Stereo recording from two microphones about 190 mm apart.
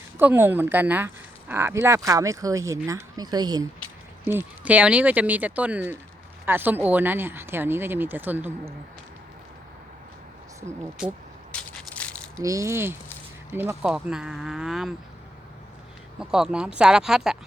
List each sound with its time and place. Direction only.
0.2 s speech: 10° right (ahead or behind)
4.3 s speech: 10° right (ahead or behind)
11.5 s crushing: 5° left (ahead or behind)
12.4 s speech: 15° right (ahead or behind); by 14.9 s centre (ahead or behind)
16.1 s speech: 5° right (ahead or behind)